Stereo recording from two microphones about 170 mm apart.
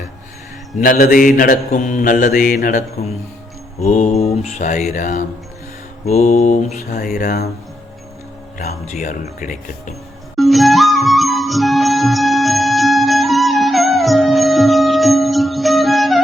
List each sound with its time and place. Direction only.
0.8 s mantra: 55° left (ahead or behind)
3.8 s mantra: 40° left (ahead or behind)
6.7 s speech: 65° left (ahead or behind)
8.5 s mantra: 50° left (ahead or behind)
10.3 s music: centre (ahead or behind)